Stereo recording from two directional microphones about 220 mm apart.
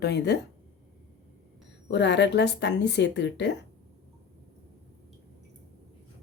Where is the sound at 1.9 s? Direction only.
50° left (ahead or behind).